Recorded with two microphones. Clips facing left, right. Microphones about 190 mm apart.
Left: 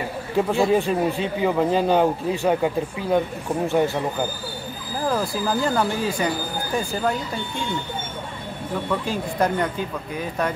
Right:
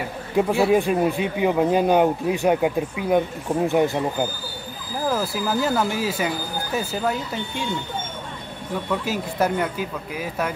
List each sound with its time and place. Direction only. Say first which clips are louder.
0.4 s speech: right 1 dB; 10° right (ahead or behind)
5.0 s speech: even; 5° right (ahead or behind)
9.0 s speech: even; 5° right (ahead or behind)